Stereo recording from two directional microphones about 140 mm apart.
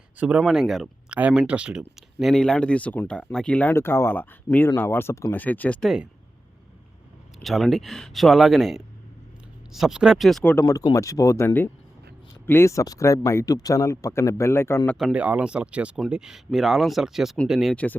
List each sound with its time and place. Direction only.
0.2 s speech: 10° right (ahead or behind); by 5.9 s 10° left (ahead or behind)
7.4 s speech: centre (ahead or behind)
10.5 s speech: 20° left (ahead or behind)
14.9 s speech: 5° right (ahead or behind)